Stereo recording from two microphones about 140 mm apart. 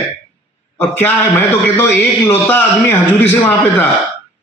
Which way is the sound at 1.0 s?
15° left (ahead or behind).